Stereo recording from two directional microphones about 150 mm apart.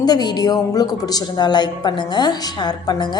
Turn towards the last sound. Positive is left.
turn(degrees=30)  # may be behind; listen again after turning